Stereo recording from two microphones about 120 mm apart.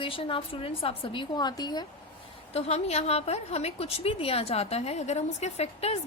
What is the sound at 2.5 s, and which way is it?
A woman's voice, 60° left (ahead or behind).